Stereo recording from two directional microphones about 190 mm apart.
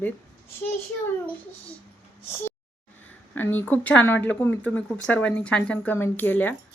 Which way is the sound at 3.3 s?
10° left (ahead or behind).